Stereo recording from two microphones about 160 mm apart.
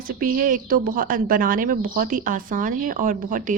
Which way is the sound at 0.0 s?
60° right (ahead or behind).